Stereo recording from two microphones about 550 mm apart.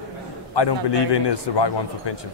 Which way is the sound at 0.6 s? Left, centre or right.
Left.